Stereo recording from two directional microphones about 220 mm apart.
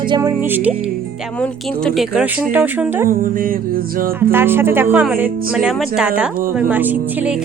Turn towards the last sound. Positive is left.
turn(degrees=-5)  # may be behind; listen again after turning